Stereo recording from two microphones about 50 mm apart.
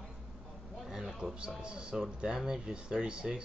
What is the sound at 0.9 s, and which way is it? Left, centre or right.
Speech, centre.